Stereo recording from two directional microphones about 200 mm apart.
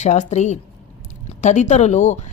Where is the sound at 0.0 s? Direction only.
35° left (ahead or behind).